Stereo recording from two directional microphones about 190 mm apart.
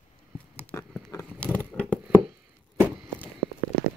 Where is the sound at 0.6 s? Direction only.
5° left (ahead or behind).